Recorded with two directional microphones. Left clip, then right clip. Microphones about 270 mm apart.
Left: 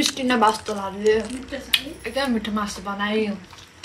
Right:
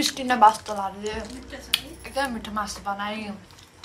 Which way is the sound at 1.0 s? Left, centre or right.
Right.